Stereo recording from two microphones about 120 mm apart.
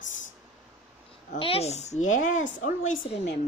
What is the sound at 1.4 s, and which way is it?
A woman's voice, 55° left (ahead or behind).